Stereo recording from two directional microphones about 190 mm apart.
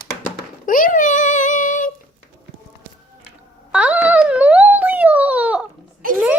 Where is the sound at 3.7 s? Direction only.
5° right (ahead or behind).